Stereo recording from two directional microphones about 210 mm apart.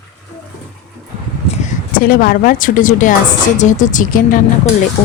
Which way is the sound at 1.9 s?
45° left (ahead or behind).